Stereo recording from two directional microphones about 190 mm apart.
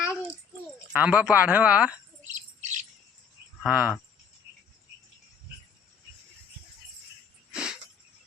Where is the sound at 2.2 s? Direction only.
40° right (ahead or behind).